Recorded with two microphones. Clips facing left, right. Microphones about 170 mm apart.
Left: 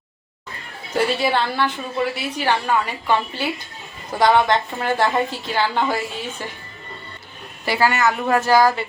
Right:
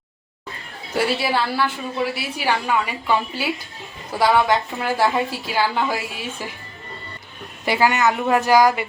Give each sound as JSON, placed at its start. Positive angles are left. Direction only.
{"t": 0.9, "sound": "a woman's voice", "side_deg": -5}
{"t": 7.6, "sound": "a woman's voice", "side_deg": -20}